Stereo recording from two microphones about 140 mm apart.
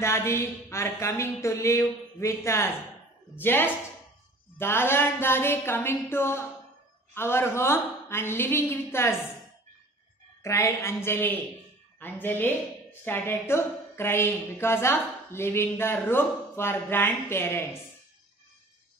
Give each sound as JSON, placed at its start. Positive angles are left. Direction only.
{"t": 0.0, "sound": "a woman's voice", "side_deg": 20}
{"t": 10.4, "sound": "a woman's voice", "side_deg": 20}